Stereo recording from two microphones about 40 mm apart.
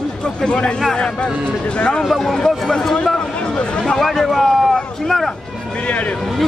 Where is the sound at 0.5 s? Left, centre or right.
Left.